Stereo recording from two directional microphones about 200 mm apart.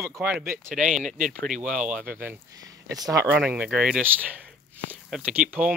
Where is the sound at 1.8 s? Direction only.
45° right (ahead or behind).